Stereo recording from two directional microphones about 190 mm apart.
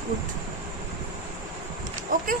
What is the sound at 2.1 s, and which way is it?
Speech, 45° right (ahead or behind).